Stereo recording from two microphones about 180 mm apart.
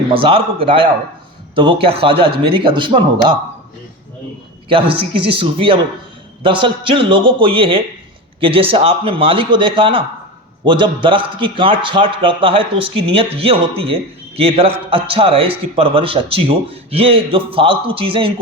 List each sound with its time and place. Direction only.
0.1 s a man's voice: 30° right (ahead or behind)
5.3 s a man's voice: 30° right (ahead or behind)